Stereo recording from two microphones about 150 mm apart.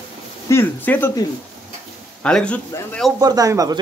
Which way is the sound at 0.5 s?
15° left (ahead or behind).